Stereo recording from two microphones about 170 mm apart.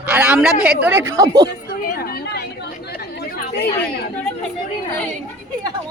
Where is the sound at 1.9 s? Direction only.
70° left (ahead or behind).